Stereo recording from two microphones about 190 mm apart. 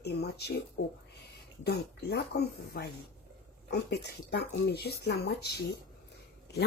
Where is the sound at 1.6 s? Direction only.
60° left (ahead or behind).